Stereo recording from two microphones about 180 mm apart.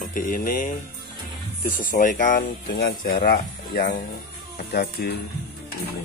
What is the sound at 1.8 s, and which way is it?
Speech, 50° left (ahead or behind).